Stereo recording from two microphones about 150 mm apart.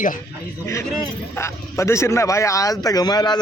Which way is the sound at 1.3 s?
20° left (ahead or behind).